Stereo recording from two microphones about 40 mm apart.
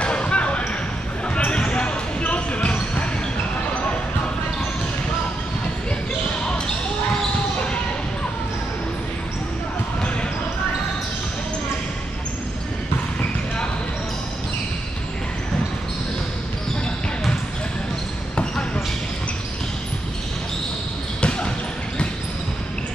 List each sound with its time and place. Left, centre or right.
0.0 s basketball bounce: left
18.3 s basketball bounce: left
21.2 s basketball bounce: left